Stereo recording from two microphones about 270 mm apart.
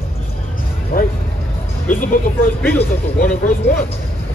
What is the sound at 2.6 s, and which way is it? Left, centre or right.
Speech, centre.